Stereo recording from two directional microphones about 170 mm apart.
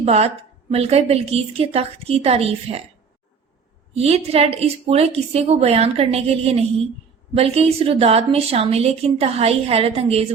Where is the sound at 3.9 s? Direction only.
35° right (ahead or behind).